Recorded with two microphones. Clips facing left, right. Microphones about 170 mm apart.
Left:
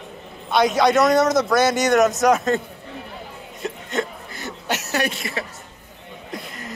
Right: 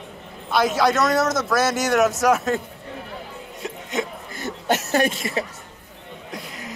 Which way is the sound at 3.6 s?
10° right (ahead or behind).